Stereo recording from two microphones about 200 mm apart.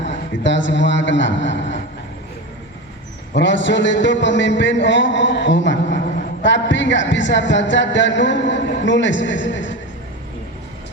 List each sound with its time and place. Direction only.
0.4 s speech: 65° left (ahead or behind)
3.3 s speech: 65° left (ahead or behind)